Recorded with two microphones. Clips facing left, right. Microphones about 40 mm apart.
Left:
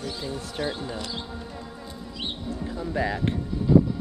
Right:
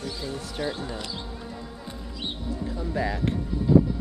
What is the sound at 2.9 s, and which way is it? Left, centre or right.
Speech, centre.